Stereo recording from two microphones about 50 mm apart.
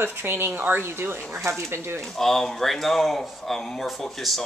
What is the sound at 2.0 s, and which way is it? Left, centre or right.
Speech, centre.